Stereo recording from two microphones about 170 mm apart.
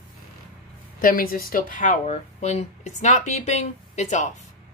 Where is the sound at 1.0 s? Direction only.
60° left (ahead or behind); by 4.3 s 45° left (ahead or behind).